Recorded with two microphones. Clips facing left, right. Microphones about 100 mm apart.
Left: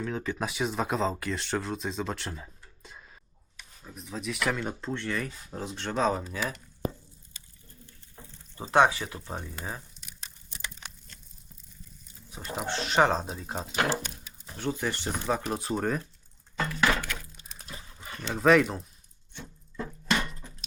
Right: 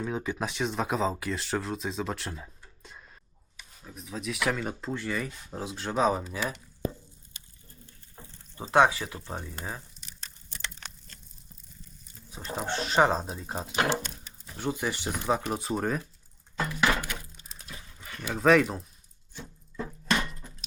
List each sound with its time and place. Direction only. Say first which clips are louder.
0.0 s speech: right 1 dB; 15° right (ahead or behind)
0.3 s speech: even; 5° left (ahead or behind)
8.6 s speech: even; 5° right (ahead or behind)
12.6 s speech: even; 40° right (ahead or behind)
13.1 s speech: even; centre (ahead or behind)
15.4 s speech: even; centre (ahead or behind)
16.6 s a sound: even; 10° right (ahead or behind)
17.6 s dog: left 2 dB; 30° left (ahead or behind)
18.3 s speech: even; centre (ahead or behind)
19.3 s a sound: right 1 dB; centre (ahead or behind)